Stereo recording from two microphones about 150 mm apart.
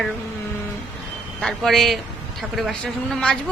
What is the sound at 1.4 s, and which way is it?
Speech, centre (ahead or behind).